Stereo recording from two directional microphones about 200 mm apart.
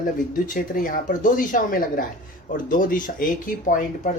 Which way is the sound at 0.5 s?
45° left (ahead or behind).